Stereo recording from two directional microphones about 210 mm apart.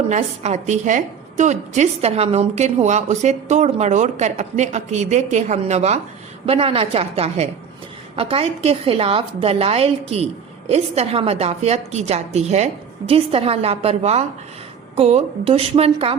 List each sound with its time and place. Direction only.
0.1 s a woman's voice: 30° right (ahead or behind)